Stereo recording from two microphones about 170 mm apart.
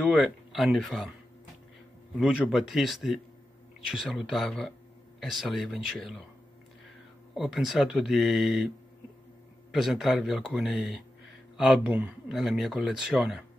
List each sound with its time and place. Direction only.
0.0 s speech: 5° right (ahead or behind)
2.1 s speech: 5° right (ahead or behind)
7.3 s speech: centre (ahead or behind)